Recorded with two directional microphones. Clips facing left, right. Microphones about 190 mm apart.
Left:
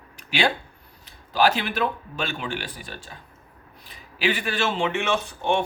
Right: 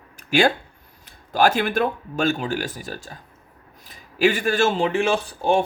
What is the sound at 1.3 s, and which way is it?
Speech, 45° right (ahead or behind).